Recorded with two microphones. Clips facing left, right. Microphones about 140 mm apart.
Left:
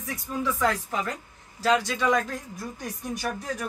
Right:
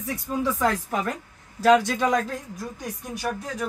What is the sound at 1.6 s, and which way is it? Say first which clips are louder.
Speech: right 5 dB; 55° right (ahead or behind).